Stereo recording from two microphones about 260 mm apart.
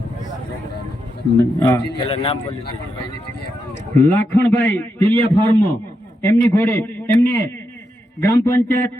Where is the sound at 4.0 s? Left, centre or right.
Centre.